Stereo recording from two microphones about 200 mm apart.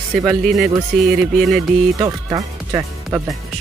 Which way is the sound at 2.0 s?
20° right (ahead or behind).